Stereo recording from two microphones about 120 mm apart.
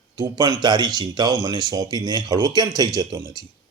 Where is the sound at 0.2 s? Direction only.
35° right (ahead or behind).